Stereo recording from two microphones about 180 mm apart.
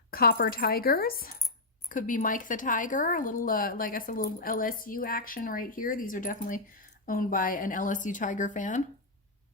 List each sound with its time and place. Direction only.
0.1 s speech: 55° left (ahead or behind)